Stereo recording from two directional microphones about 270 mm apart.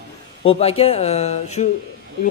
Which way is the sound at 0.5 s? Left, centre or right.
Left.